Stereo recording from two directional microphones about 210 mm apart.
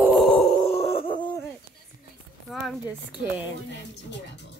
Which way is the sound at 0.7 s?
30° left (ahead or behind).